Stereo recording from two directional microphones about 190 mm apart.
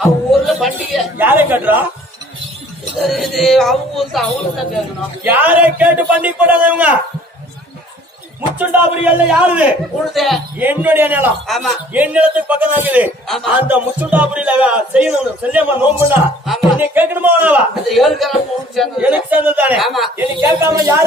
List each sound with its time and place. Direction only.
0.3 s a sound: centre (ahead or behind)
1.2 s a man's voice: 10° right (ahead or behind)
3.0 s speech: centre (ahead or behind)
5.2 s a man's voice: 10° right (ahead or behind)
8.5 s a man's voice: 10° right (ahead or behind)
11.4 s a man's voice: centre (ahead or behind)
20.1 s a man's voice: 15° right (ahead or behind)